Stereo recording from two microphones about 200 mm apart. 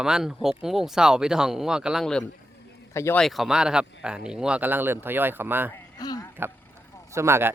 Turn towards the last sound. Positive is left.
turn(degrees=-10)  # may be behind; listen again after turning